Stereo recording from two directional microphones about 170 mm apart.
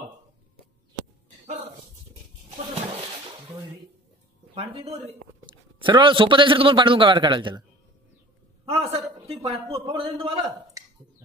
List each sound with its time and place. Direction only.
4.6 s speech: 35° right (ahead or behind)
8.6 s a man's voice: 35° right (ahead or behind)